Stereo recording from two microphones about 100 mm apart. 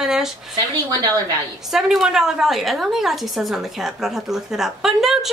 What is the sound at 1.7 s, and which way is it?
A woman's voice, 5° right (ahead or behind).